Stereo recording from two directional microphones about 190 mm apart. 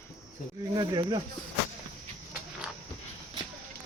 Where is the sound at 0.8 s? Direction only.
20° right (ahead or behind).